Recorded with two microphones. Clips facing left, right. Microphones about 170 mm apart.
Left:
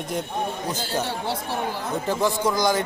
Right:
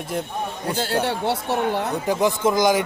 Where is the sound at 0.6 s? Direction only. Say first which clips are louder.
Right 4 dB; 65° right (ahead or behind).